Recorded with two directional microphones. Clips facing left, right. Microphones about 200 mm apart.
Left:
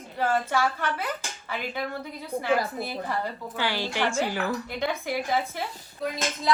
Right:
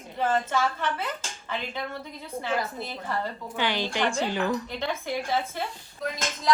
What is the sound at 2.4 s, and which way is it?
Speech, 10° left (ahead or behind).